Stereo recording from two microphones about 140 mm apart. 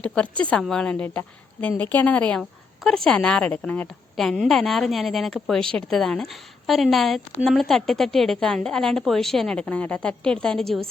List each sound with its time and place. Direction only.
0.0 s a woman's voice: 10° left (ahead or behind)